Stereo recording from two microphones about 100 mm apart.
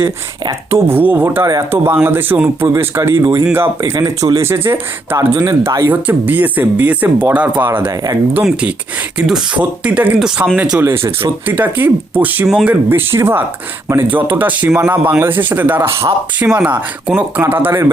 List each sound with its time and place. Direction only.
0.7 s speech: 25° right (ahead or behind)
3.9 s speech: 35° right (ahead or behind)
5.9 s speech: 15° right (ahead or behind)
9.1 s speech: 10° right (ahead or behind)
10.8 s speech: 25° right (ahead or behind)